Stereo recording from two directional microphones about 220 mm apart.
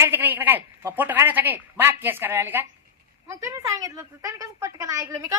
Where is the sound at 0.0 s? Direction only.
10° right (ahead or behind).